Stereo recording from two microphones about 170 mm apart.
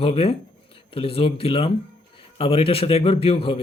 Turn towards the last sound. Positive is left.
turn(degrees=35)  # may be behind; listen again after turning